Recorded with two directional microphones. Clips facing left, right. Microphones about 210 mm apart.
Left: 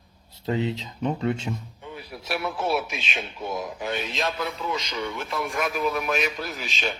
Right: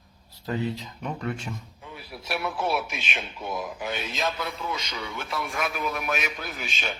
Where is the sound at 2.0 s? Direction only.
Centre (ahead or behind).